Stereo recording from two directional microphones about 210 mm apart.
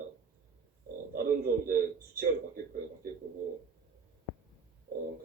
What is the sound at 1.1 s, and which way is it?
A man's voice, 45° right (ahead or behind).